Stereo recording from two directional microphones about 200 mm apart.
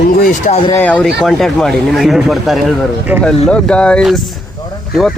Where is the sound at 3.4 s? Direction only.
5° left (ahead or behind).